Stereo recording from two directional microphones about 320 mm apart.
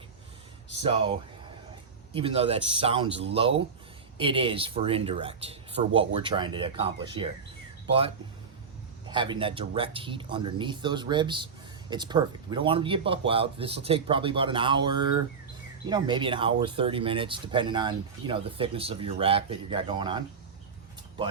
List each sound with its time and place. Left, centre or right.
0.9 s speech: centre
2.1 s speech: centre
9.0 s speech: centre